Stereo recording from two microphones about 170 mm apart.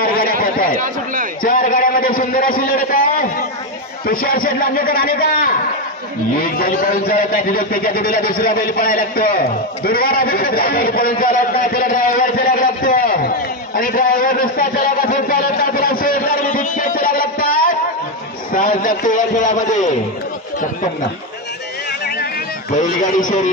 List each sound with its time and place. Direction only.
0.0 s a sound: 60° left (ahead or behind)
1.4 s a man's voice: 55° left (ahead or behind)
22.8 s a man's voice: 50° left (ahead or behind)